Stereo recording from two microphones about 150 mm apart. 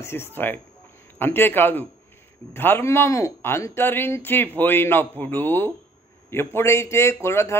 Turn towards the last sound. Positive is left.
turn(degrees=20)  # may be behind; listen again after turning